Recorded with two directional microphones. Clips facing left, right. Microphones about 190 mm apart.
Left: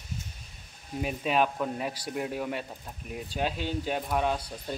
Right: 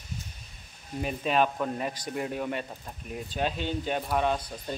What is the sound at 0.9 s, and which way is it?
Speech, 5° left (ahead or behind).